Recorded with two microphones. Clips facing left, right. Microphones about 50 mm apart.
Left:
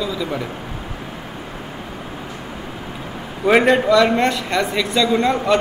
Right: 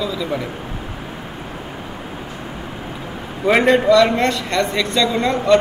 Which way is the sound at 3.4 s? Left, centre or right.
Centre.